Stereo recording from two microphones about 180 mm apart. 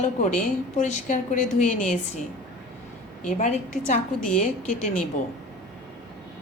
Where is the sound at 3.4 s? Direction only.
40° left (ahead or behind).